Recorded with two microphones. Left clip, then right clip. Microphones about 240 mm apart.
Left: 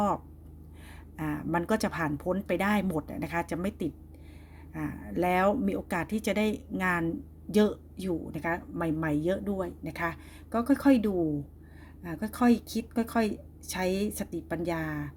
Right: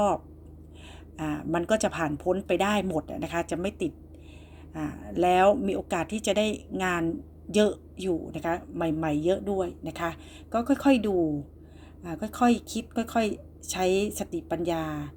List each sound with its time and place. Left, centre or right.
1.1 s a woman's voice: left